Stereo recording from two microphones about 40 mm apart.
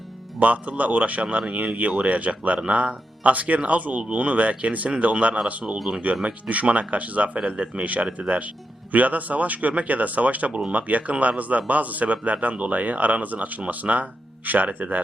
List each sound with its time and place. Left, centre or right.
0.3 s speech: right
7.4 s a man's voice: right
8.9 s speech: right